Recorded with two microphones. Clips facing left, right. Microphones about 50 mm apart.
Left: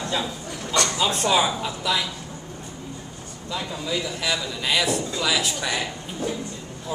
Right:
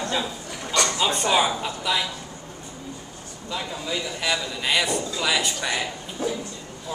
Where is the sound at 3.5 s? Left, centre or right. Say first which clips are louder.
Left 1 dB; centre.